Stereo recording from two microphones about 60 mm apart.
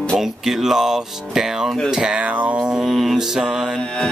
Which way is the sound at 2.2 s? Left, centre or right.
Right.